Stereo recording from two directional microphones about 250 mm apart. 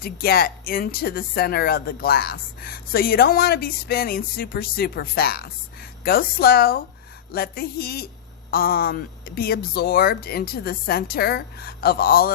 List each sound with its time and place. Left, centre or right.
0.0 s speech: left